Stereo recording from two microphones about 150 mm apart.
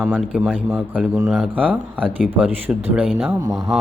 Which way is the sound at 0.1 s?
5° right (ahead or behind).